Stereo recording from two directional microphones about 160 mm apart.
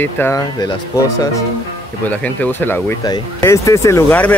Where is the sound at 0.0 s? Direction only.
15° left (ahead or behind).